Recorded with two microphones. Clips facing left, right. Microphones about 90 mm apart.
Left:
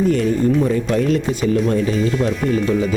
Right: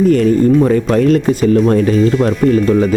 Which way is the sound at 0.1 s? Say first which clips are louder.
Right 6 dB; 55° right (ahead or behind).